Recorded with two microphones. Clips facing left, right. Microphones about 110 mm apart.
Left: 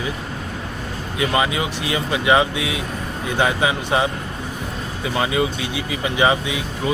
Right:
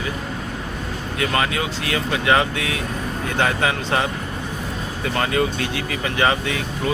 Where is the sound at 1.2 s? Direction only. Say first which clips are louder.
Left 2 dB; 15° left (ahead or behind).